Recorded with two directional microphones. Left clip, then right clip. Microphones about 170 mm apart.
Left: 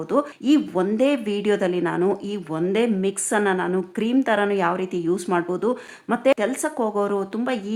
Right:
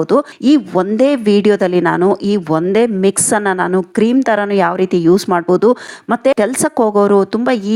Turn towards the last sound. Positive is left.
turn(degrees=-40)  # may be behind; listen again after turning